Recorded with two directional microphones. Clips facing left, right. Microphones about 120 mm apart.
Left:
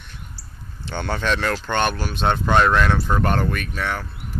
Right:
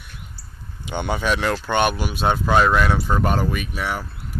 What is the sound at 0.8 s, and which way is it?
Speech, 15° right (ahead or behind).